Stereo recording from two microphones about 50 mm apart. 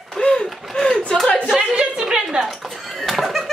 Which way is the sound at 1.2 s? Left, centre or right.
Left.